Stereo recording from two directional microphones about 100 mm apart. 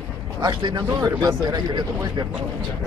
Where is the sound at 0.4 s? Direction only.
50° right (ahead or behind).